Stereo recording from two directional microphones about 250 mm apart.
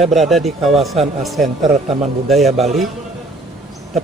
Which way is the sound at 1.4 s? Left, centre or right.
Right.